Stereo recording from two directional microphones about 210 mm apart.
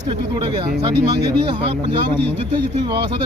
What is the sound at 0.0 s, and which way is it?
Speech, 25° right (ahead or behind).